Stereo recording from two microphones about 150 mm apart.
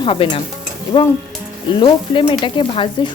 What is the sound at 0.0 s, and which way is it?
Speech, 35° left (ahead or behind).